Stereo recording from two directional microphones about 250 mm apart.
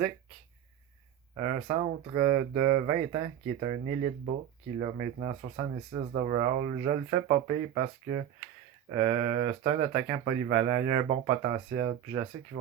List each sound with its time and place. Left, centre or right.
1.4 s speech: right
4.8 s speech: right